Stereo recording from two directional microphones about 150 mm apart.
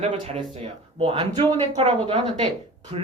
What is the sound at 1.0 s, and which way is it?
Speech, 40° right (ahead or behind).